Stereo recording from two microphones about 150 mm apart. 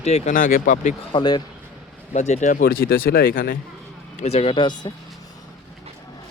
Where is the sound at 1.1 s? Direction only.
25° left (ahead or behind).